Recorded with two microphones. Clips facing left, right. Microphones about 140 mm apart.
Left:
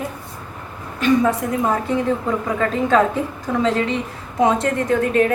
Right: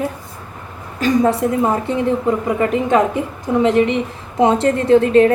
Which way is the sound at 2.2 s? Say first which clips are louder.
Right 4 dB; 20° right (ahead or behind).